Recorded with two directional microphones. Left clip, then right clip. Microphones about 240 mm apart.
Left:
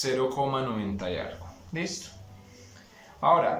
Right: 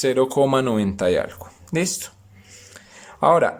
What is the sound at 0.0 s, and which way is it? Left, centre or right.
Speech, right.